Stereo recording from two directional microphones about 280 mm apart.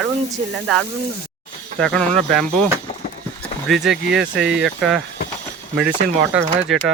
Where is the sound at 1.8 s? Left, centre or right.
Centre.